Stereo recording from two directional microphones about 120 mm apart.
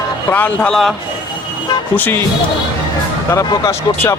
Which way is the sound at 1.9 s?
15° left (ahead or behind).